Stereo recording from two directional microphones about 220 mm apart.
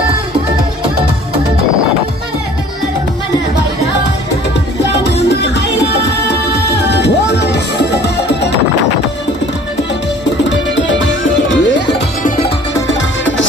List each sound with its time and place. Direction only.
5.0 s music: 50° left (ahead or behind)
10.5 s music: 55° left (ahead or behind)
12.2 s music: 35° left (ahead or behind)